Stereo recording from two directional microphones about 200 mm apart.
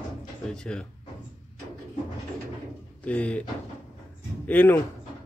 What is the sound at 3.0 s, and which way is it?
Speech, 5° left (ahead or behind).